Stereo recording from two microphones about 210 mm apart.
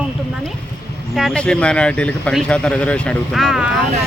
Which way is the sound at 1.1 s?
Centre (ahead or behind).